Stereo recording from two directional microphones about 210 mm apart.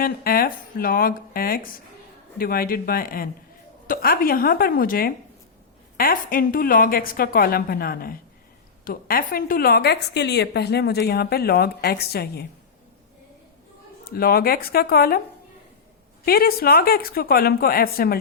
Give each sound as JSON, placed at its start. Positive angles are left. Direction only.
{"t": 0.0, "sound": "a woman's voice", "side_deg": 45}
{"t": 14.0, "sound": "a woman's voice", "side_deg": 45}
{"t": 16.2, "sound": "a woman's voice", "side_deg": 45}